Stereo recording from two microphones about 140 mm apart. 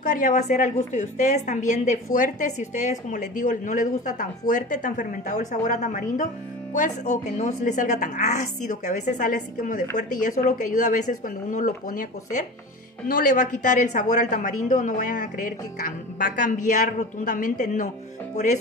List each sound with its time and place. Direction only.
0.2 s a woman's voice: 65° left (ahead or behind)
16.6 s a woman's voice: 65° left (ahead or behind)